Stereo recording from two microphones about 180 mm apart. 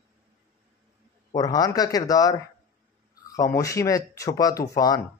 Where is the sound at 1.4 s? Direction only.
20° left (ahead or behind).